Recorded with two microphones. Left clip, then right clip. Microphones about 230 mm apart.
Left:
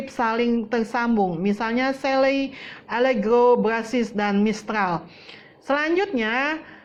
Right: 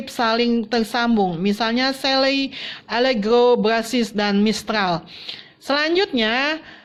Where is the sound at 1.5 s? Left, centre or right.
Right.